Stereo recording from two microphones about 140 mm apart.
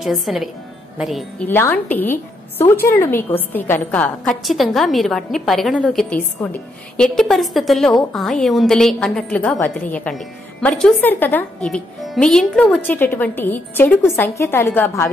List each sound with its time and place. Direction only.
0.0 s a woman's voice: centre (ahead or behind)
1.5 s a woman's voice: 15° left (ahead or behind)
11.6 s a woman's voice: centre (ahead or behind)
12.8 s a woman's voice: 15° left (ahead or behind)